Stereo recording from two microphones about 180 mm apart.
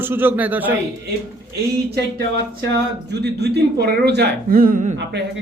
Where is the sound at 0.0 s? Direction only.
10° right (ahead or behind).